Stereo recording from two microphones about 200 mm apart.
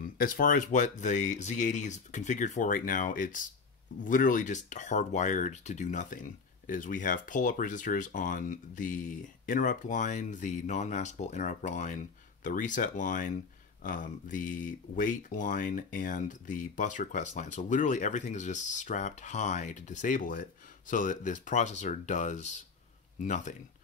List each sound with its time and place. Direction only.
0.0 s speech: 45° left (ahead or behind)